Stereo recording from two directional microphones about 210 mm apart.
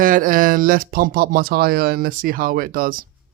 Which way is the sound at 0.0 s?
40° right (ahead or behind).